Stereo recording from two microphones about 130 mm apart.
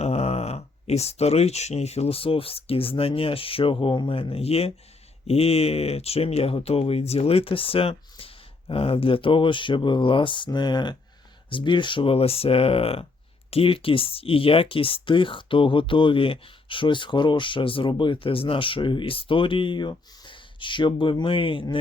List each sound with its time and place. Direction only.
0.0 s speech: 55° left (ahead or behind)